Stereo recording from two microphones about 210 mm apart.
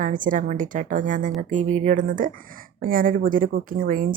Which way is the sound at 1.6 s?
90° right.